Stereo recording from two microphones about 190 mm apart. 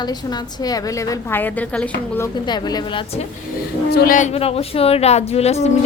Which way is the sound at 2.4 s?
20° left (ahead or behind).